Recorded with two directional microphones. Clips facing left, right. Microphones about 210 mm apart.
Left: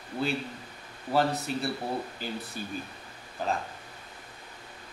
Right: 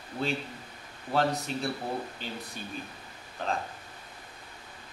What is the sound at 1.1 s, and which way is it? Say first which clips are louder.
Speech: left 1 dB; 5° left (ahead or behind).